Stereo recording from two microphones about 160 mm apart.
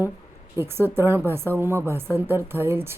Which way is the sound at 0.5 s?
15° right (ahead or behind).